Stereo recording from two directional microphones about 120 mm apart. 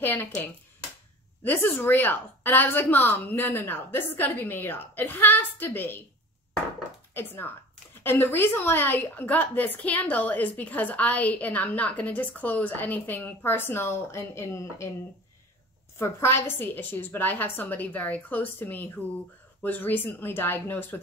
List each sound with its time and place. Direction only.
0.0 s a woman's voice: 20° left (ahead or behind)
7.2 s a woman's voice: 15° left (ahead or behind)
16.0 s a woman's voice: 20° left (ahead or behind)